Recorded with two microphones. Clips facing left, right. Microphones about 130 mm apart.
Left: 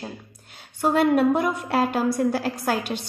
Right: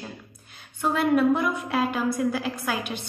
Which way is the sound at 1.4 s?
45° left (ahead or behind).